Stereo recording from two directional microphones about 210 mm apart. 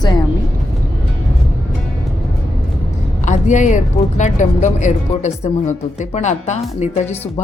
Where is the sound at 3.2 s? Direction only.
35° left (ahead or behind).